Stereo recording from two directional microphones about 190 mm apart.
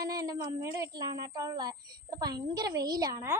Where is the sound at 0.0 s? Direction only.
20° right (ahead or behind).